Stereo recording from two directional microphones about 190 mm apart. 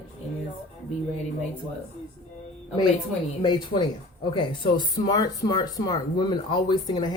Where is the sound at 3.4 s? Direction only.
20° left (ahead or behind).